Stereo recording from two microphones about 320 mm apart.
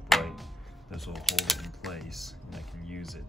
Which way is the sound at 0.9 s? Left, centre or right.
Centre.